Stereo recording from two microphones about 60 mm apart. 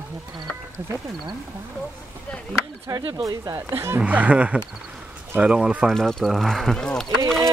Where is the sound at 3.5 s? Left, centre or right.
Right.